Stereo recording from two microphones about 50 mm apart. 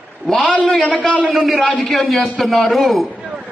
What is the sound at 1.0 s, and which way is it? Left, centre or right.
Speech, right.